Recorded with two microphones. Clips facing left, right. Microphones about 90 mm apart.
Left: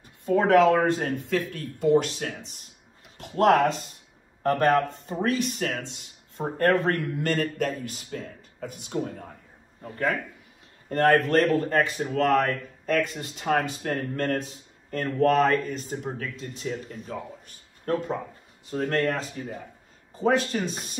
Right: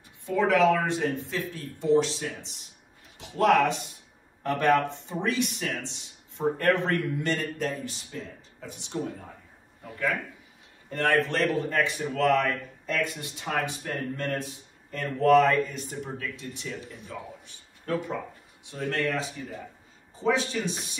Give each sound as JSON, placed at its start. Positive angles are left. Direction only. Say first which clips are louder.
{"t": 0.2, "sound": "speech", "louder": "left 4 dB", "side_deg": 45}